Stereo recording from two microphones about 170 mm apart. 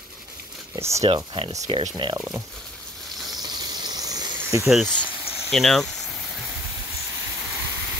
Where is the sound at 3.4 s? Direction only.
25° right (ahead or behind).